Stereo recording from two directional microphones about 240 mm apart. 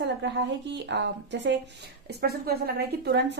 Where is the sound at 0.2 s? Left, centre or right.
Right.